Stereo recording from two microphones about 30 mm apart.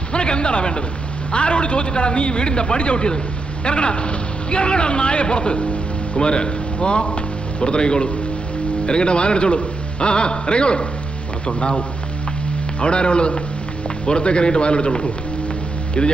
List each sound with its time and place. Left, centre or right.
0.1 s a man's voice: left